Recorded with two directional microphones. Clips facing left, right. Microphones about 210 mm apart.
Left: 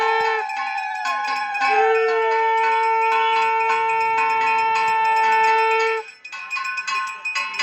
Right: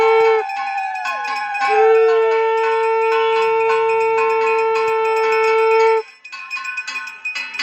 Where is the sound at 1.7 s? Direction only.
40° right (ahead or behind).